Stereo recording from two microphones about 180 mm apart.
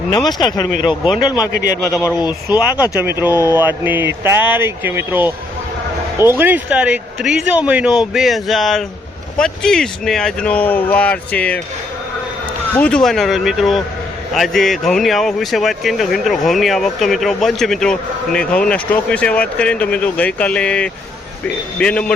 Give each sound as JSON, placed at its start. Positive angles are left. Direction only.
{"t": 0.3, "sound": "speech", "side_deg": 25}
{"t": 1.5, "sound": "a man's voice", "side_deg": -50}
{"t": 2.5, "sound": "speech", "side_deg": -10}
{"t": 6.4, "sound": "speech", "side_deg": -10}
{"t": 12.7, "sound": "speech", "side_deg": 5}